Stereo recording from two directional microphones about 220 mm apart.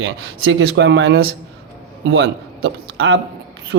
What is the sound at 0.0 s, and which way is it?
A man's voice, 55° right (ahead or behind).